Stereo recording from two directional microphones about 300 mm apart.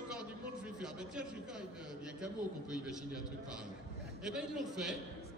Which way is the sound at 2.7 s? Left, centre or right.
Centre.